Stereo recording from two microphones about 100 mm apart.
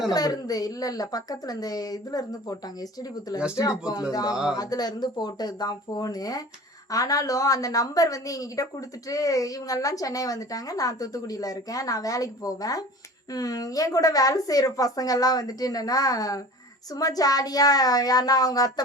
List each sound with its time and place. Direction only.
0.1 s a woman's voice: 40° left (ahead or behind)